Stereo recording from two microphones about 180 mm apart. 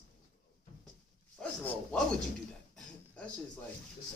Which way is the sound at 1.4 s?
5° left (ahead or behind).